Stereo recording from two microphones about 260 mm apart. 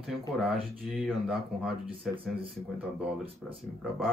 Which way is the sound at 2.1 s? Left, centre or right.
Right.